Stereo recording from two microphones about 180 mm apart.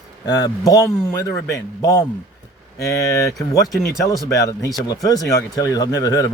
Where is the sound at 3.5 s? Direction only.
20° left (ahead or behind).